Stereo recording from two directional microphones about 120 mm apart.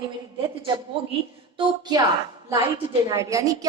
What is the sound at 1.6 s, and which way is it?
Speech, 35° right (ahead or behind).